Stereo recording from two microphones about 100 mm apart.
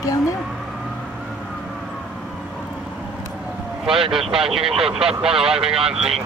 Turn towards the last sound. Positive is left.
turn(degrees=-5)  # may be behind; listen again after turning